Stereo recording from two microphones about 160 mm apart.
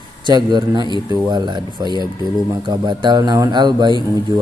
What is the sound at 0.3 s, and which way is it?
A man's voice, 25° right (ahead or behind).